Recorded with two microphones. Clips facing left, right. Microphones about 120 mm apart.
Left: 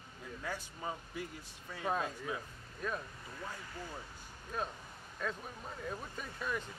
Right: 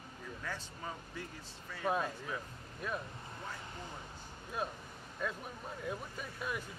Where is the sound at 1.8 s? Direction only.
10° right (ahead or behind).